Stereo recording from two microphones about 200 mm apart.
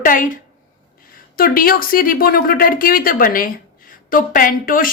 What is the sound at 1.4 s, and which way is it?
Speech, 45° left (ahead or behind).